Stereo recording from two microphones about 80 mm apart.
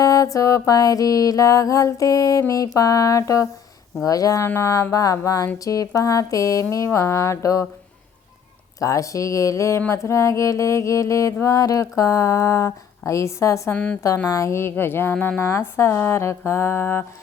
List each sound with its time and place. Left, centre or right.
0.0 s mantra: left
4.4 s mantra: left
8.8 s mantra: left
13.7 s a woman's voice: centre
14.3 s mantra: left